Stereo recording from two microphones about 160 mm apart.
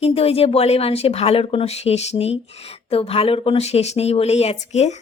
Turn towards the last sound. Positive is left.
turn(degrees=45)  # may be behind; listen again after turning